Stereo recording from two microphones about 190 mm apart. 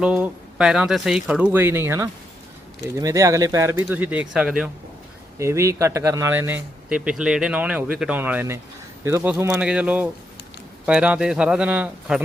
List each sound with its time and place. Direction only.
0.0 s speech: 5° right (ahead or behind)
5.4 s speech: 15° right (ahead or behind)